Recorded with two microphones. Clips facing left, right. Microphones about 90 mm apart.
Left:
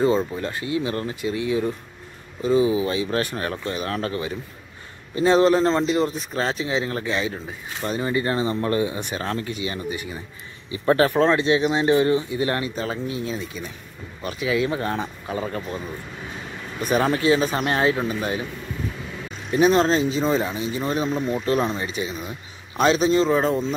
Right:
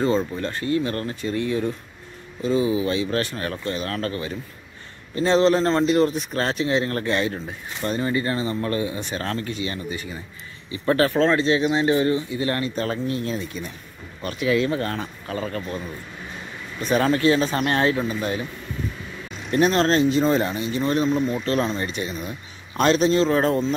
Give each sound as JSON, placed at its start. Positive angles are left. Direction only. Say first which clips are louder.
{"t": 0.0, "sound": "speech", "louder": "left 1 dB", "side_deg": 10}
{"t": 2.4, "sound": "speech", "louder": "left 2 dB", "side_deg": 25}
{"t": 5.1, "sound": "speech", "louder": "left 1 dB", "side_deg": 10}
{"t": 8.0, "sound": "speech", "louder": "left 2 dB", "side_deg": 20}
{"t": 16.8, "sound": "speech", "louder": "right 1 dB", "side_deg": 15}
{"t": 19.5, "sound": "a man's voice", "louder": "left 1 dB", "side_deg": 10}